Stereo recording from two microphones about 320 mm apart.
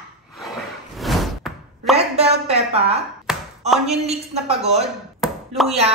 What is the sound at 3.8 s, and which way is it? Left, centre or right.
A woman's voice, centre.